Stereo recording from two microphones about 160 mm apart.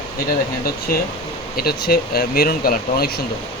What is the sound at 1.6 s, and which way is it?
Speech, 75° left (ahead or behind).